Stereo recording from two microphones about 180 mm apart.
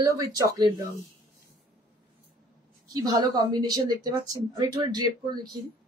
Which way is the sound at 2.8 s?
20° right (ahead or behind).